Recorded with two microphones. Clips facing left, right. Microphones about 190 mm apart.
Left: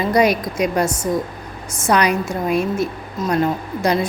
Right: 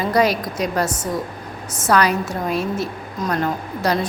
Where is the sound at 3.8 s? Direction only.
10° left (ahead or behind).